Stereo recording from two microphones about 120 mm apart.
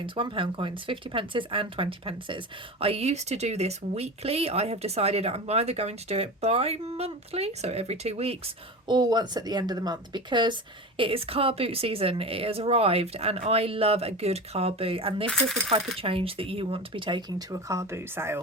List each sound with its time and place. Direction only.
0.0 s speech: 45° right (ahead or behind)
2.8 s speech: 60° right (ahead or behind)
8.9 s speech: 35° right (ahead or behind); by 15.3 s 50° right (ahead or behind)
15.3 s speech: 5° left (ahead or behind)
16.0 s speech: 50° right (ahead or behind); by 18.3 s 20° right (ahead or behind)